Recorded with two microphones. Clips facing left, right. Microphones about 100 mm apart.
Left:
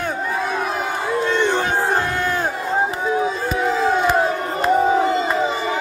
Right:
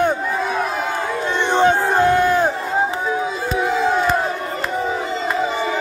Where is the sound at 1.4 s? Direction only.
20° right (ahead or behind).